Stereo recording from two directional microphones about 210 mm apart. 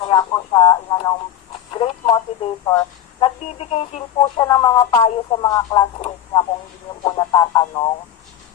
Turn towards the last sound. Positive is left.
turn(degrees=20)  # may be behind; listen again after turning